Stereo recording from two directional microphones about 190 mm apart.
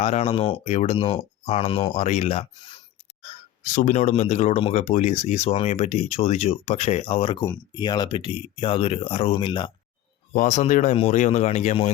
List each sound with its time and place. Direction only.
0.0 s speech: 30° left (ahead or behind)
3.6 s speech: 45° left (ahead or behind); by 9.7 s 25° left (ahead or behind)
10.3 s speech: 40° left (ahead or behind)